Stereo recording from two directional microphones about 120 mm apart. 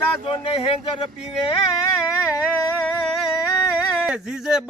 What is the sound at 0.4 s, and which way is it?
Speech, 50° left (ahead or behind).